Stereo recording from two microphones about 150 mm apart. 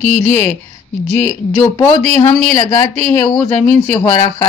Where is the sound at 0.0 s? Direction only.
10° left (ahead or behind).